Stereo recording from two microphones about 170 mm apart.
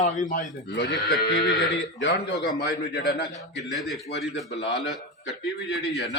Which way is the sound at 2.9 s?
65° left (ahead or behind).